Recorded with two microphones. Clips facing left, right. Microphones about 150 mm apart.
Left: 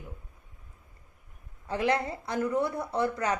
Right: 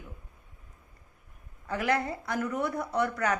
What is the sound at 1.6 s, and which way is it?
Speech, 25° left (ahead or behind).